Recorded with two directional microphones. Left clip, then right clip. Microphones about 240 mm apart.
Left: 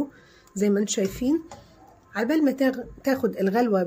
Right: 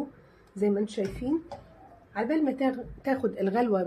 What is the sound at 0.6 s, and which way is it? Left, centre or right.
Speech, left.